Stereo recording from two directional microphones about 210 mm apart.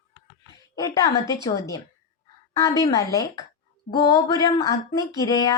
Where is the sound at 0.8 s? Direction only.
15° left (ahead or behind).